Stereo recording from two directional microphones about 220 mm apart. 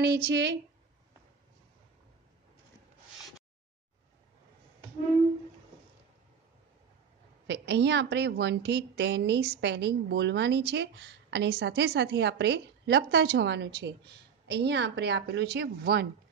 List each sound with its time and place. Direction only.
0.0 s a woman's voice: 50° right (ahead or behind)
7.4 s a woman's voice: 50° right (ahead or behind)